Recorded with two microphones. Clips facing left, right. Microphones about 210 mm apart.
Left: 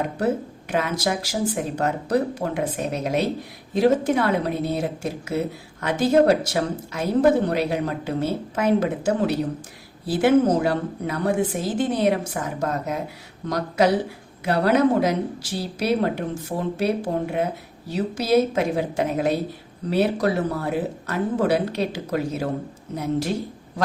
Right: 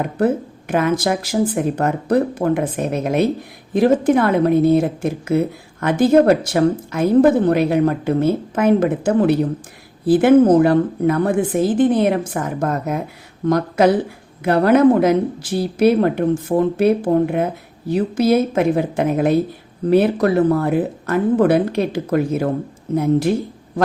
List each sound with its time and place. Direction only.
0.7 s a woman's voice: 50° right (ahead or behind)